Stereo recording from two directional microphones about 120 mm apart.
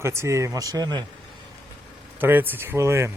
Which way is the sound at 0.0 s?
25° right (ahead or behind).